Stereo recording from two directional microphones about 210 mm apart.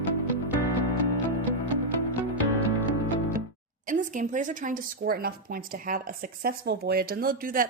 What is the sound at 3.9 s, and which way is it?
Speech, 35° right (ahead or behind).